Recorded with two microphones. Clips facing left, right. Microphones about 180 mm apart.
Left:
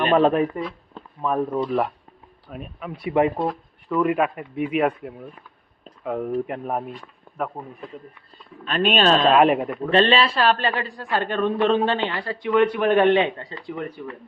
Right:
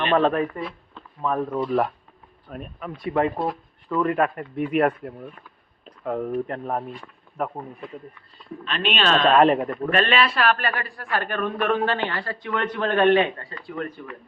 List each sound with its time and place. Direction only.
0.1 s speech: 15° left (ahead or behind)
3.3 s a sound: 5° right (ahead or behind)
3.9 s speech: 10° left (ahead or behind)
7.3 s a sound: 50° left (ahead or behind)
8.6 s speech: 45° left (ahead or behind)
9.2 s speech: 5° left (ahead or behind)
9.9 s a man's voice: 30° left (ahead or behind)